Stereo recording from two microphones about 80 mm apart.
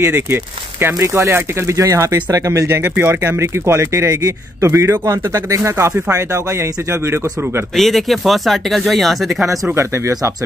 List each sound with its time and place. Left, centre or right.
0.0 s speech: right
0.9 s speech: right
2.8 s speech: right
7.7 s speech: centre
9.8 s speech: right